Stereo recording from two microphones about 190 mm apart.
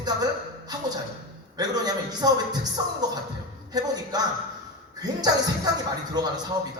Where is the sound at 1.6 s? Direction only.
20° right (ahead or behind).